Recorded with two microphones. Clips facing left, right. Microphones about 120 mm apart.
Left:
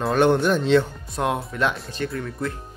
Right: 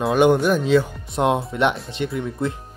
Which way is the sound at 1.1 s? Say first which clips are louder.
Right 5 dB; 20° right (ahead or behind).